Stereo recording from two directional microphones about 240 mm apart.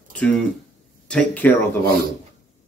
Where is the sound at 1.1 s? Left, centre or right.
Centre.